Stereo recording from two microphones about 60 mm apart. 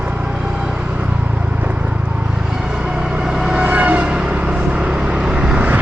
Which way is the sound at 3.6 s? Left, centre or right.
Right.